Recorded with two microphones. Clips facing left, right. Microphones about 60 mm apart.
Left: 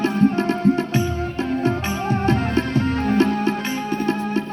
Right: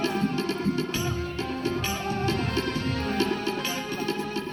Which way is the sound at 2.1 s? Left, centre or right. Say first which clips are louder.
Left 9 dB; left.